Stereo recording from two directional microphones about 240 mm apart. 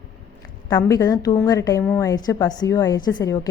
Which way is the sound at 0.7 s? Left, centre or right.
Centre.